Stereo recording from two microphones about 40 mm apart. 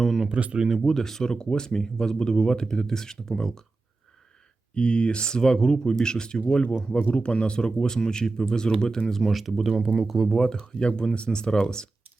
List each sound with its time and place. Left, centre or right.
0.3 s speech: right
0.8 s speech: centre
4.7 s speech: left
6.8 s speech: left; by 10.2 s centre
10.3 s speech: centre